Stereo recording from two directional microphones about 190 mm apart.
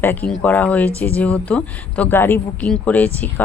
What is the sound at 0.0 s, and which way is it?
Speech, 10° left (ahead or behind).